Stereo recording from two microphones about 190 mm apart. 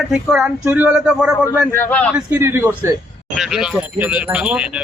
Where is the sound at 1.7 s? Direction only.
10° left (ahead or behind).